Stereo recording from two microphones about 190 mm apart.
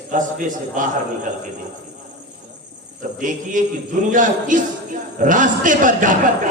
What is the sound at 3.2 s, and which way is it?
A man's voice, 45° right (ahead or behind).